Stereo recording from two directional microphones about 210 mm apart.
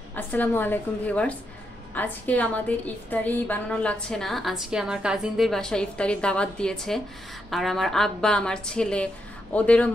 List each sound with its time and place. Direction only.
0.1 s a woman's voice: 10° left (ahead or behind)